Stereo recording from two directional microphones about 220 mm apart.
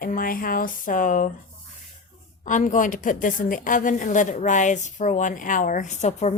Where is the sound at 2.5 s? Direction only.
35° left (ahead or behind).